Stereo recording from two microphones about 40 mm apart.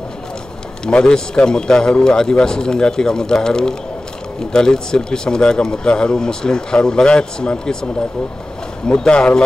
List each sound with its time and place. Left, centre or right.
0.8 s a man's voice: left
8.8 s speech: left